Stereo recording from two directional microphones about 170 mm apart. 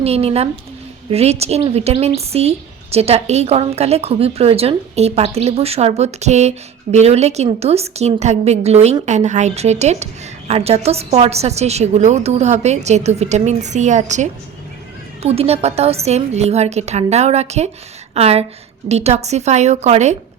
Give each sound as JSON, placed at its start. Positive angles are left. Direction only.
{"t": 0.0, "sound": "a woman's voice", "side_deg": -35}